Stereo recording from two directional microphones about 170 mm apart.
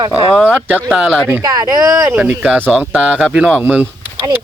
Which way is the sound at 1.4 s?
20° right (ahead or behind).